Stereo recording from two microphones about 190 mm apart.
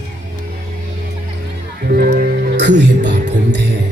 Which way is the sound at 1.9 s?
50° right (ahead or behind).